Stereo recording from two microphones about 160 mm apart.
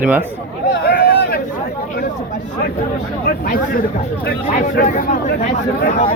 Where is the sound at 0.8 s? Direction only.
90° left.